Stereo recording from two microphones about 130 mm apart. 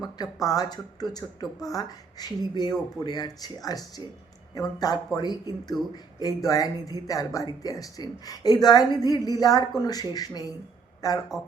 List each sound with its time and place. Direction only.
0.0 s speech: 30° left (ahead or behind)